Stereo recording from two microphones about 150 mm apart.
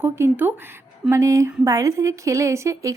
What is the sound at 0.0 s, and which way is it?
A woman's voice, 15° right (ahead or behind).